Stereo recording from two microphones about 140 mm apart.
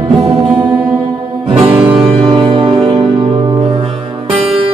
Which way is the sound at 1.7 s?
40° right (ahead or behind).